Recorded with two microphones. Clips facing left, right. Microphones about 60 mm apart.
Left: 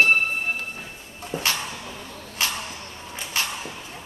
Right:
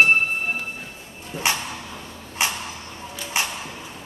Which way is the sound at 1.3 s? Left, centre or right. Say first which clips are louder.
Right 2 dB; left.